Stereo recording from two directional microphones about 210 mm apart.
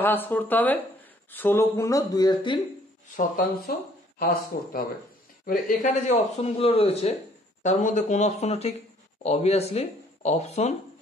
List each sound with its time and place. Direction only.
0.0 s speech: 10° left (ahead or behind)
4.2 s a man's voice: 45° left (ahead or behind)